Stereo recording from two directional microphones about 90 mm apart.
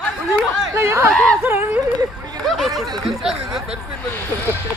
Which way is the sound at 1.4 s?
20° right (ahead or behind).